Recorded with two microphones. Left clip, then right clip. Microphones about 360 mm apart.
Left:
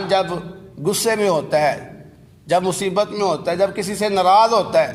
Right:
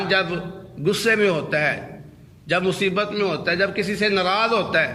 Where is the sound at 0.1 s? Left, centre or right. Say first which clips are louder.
Left 4 dB; centre.